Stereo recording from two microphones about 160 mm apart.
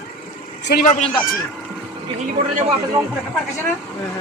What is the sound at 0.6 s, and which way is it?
Speech, 90° left.